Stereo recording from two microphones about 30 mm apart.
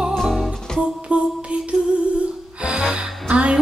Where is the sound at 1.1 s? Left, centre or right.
Right.